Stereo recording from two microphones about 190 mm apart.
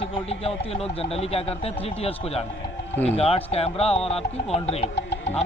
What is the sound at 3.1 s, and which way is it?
Speech, 30° left (ahead or behind).